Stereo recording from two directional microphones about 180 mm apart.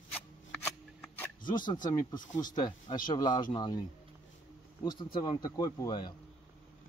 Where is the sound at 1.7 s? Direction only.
20° left (ahead or behind).